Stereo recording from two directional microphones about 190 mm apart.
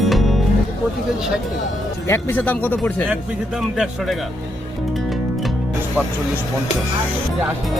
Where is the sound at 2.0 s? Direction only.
10° left (ahead or behind).